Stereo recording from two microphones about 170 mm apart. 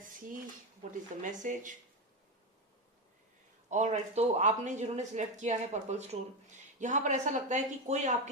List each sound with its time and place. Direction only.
0.9 s speech: 50° right (ahead or behind)
3.7 s speech: 45° right (ahead or behind)